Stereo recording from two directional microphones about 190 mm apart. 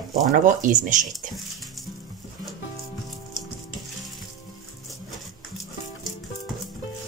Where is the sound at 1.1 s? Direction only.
Centre (ahead or behind).